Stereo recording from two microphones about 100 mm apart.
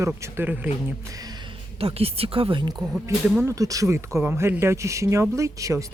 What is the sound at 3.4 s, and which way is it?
Speech, 35° right (ahead or behind).